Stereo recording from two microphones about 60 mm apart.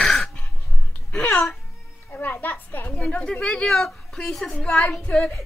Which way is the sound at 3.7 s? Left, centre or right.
Centre.